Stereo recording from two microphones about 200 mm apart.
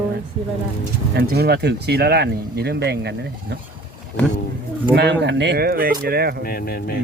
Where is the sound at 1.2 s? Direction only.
50° right (ahead or behind).